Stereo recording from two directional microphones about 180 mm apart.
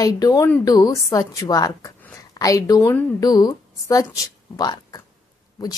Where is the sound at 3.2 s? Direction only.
20° left (ahead or behind).